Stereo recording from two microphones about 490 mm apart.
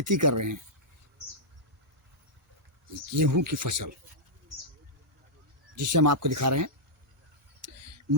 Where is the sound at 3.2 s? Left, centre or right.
Right.